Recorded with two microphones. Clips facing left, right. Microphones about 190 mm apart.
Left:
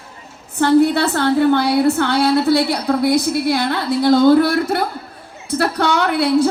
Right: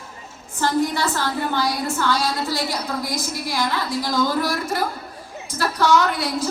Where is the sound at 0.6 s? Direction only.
65° left (ahead or behind).